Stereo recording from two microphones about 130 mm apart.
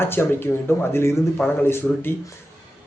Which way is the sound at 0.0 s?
20° left (ahead or behind).